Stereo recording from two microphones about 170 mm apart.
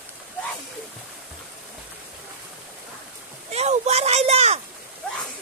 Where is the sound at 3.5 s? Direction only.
40° right (ahead or behind).